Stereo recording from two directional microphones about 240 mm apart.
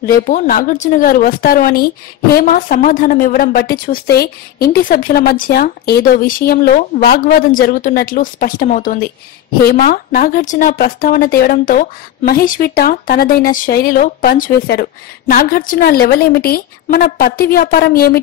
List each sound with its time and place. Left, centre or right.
0.1 s a woman's voice: left